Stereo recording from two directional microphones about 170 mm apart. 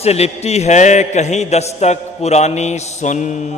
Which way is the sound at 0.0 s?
40° left (ahead or behind).